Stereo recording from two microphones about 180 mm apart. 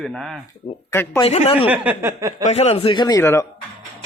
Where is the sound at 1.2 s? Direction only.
35° left (ahead or behind).